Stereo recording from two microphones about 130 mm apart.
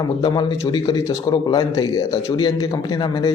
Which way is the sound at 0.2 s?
30° left (ahead or behind).